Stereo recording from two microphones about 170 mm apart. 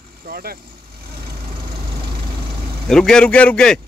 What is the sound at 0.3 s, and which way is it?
Speech, 60° right (ahead or behind).